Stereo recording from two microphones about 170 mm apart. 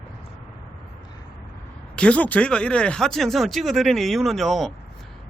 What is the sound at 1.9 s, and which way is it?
Speech, 5° left (ahead or behind).